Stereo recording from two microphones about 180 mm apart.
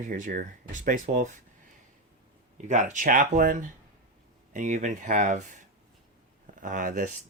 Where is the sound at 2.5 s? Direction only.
45° right (ahead or behind).